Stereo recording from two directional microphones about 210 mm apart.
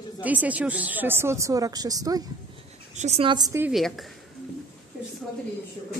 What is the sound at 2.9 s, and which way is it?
Speech, 30° right (ahead or behind).